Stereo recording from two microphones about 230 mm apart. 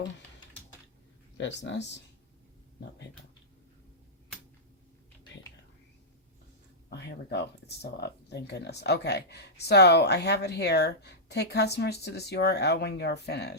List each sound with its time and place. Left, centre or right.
1.4 s speech: left
6.9 s speech: left